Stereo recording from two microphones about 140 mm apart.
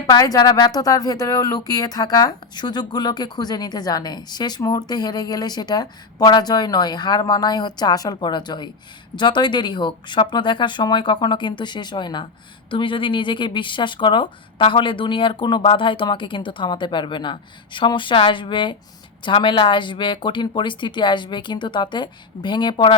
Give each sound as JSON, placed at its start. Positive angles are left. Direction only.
{"t": 0.1, "sound": "speech", "side_deg": 25}